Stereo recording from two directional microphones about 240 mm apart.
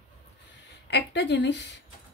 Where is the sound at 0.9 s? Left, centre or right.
Left.